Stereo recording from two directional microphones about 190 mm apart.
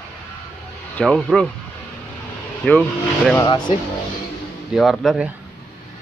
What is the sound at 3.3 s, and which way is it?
Speech, 25° left (ahead or behind).